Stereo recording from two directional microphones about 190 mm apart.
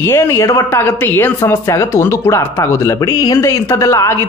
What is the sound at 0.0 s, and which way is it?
A woman's voice, 15° left (ahead or behind).